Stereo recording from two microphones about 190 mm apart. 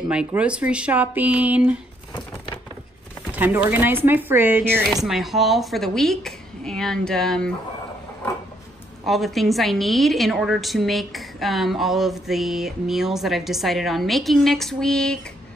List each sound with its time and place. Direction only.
0.1 s speech: 5° right (ahead or behind)
2.1 s a sound: 25° left (ahead or behind)
3.3 s a woman's voice: 10° right (ahead or behind)
9.0 s a woman's voice: centre (ahead or behind)